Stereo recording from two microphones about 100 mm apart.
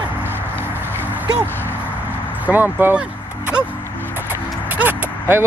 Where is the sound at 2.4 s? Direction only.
20° right (ahead or behind).